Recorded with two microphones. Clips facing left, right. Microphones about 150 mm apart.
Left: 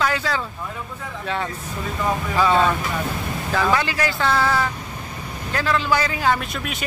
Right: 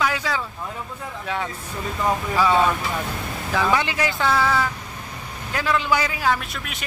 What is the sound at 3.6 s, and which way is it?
Speech, 20° right (ahead or behind).